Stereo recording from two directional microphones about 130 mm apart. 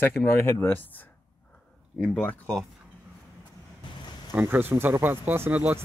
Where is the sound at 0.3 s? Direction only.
20° left (ahead or behind).